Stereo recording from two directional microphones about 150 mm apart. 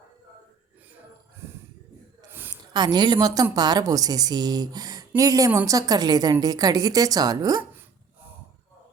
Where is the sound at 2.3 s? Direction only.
15° right (ahead or behind).